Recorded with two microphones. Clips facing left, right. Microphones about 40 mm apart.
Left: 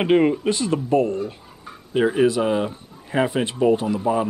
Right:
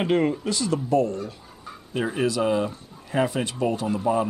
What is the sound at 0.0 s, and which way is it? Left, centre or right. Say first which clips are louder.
Speech: left 5 dB; left.